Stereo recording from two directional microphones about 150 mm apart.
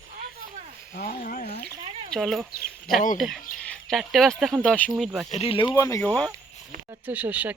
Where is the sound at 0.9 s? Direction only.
75° left (ahead or behind).